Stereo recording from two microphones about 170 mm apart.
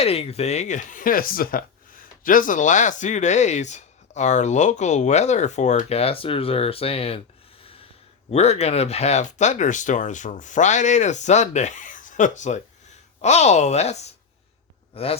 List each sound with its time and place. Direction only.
0.0 s speech: 35° left (ahead or behind)
7.6 s snort: 35° left (ahead or behind)
8.3 s speech: 40° left (ahead or behind)